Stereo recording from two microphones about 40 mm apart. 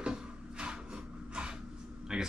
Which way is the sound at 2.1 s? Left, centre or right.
Centre.